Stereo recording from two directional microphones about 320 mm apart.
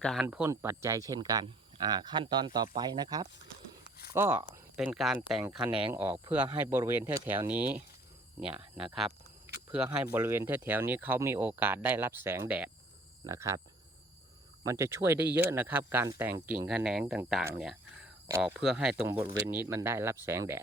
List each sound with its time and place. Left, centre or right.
0.0 s speech: centre
3.8 s a sound: left
4.1 s speech: centre
14.6 s speech: centre